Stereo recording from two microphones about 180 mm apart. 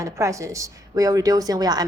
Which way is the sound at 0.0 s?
15° right (ahead or behind).